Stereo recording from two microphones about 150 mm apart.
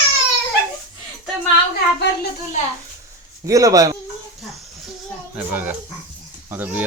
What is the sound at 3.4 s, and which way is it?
Speech, 20° right (ahead or behind).